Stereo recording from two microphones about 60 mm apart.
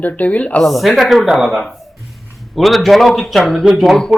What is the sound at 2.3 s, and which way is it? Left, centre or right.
A man's voice, centre.